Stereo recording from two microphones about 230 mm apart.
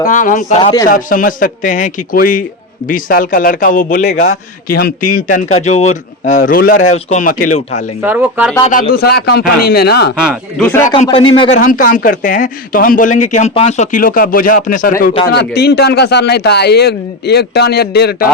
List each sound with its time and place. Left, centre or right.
0.1 s speech: left
4.2 s a man's voice: left
4.8 s speech: left
5.3 s speech: left
5.6 s speech: left
8.0 s speech: centre
8.6 s a man's voice: left
10.6 s a man's voice: centre
10.8 s speech: left
11.6 s a man's voice: left